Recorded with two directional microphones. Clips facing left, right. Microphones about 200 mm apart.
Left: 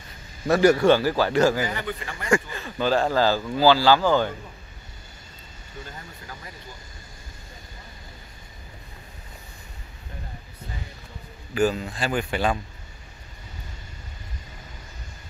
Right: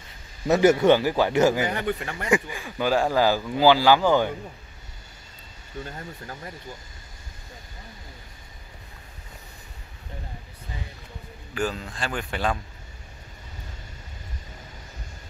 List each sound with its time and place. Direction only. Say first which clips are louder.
0.5 s a man's voice: even; 20° right (ahead or behind)
1.7 s speech: right 4 dB; 55° right (ahead or behind)
2.3 s speech: left 1 dB; 10° right (ahead or behind)
11.5 s speech: left 6 dB; 10° left (ahead or behind)